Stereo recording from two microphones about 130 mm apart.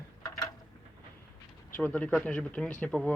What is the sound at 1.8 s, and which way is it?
Speech, 10° left (ahead or behind).